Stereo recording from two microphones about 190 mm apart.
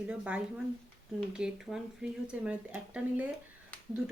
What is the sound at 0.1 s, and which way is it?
Speech, 5° right (ahead or behind).